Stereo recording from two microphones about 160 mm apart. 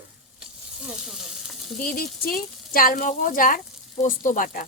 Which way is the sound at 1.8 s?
65° left (ahead or behind).